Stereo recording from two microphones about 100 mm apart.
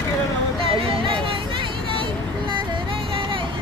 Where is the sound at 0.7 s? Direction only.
60° right (ahead or behind).